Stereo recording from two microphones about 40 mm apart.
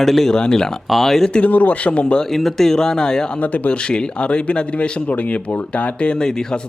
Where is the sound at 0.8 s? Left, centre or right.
Centre.